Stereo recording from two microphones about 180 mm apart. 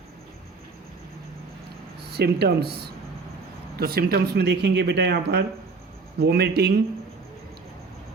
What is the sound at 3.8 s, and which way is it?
Speech, 60° right (ahead or behind).